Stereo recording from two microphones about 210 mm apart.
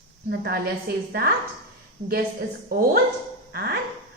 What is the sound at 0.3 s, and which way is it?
A woman's voice, 50° right (ahead or behind).